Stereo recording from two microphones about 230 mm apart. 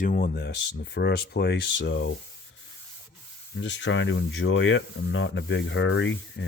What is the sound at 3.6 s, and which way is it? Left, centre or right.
Speech, left.